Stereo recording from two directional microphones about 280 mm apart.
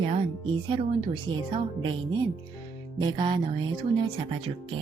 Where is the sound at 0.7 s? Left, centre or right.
Centre.